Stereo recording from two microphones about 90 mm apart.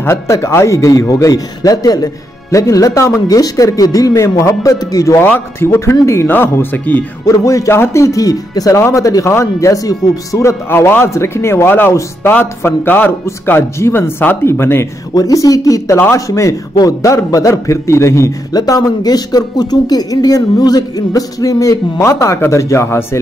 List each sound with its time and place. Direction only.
0.0 s a man's voice: 30° left (ahead or behind)
5.2 s a man's voice: 25° left (ahead or behind)
7.4 s a man's voice: 35° left (ahead or behind)
10.7 s a man's voice: 25° left (ahead or behind)
15.1 s a man's voice: 40° left (ahead or behind)